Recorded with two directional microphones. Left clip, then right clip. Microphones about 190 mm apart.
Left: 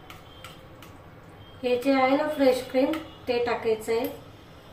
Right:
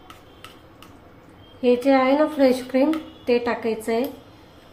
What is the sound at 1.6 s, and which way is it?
A woman's voice, 55° right (ahead or behind).